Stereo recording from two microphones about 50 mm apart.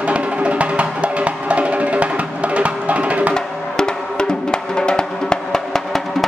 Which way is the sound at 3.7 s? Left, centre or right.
Centre.